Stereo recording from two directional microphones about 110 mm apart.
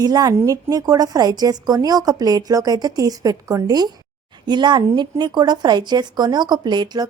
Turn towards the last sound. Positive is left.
turn(degrees=-40)  # may be behind; listen again after turning